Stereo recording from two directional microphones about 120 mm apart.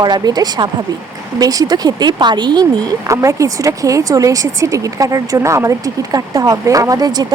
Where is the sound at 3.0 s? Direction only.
25° right (ahead or behind).